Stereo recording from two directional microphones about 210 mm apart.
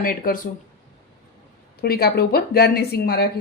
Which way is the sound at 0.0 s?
40° left (ahead or behind).